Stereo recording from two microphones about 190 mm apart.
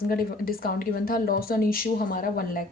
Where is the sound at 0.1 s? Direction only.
50° left (ahead or behind).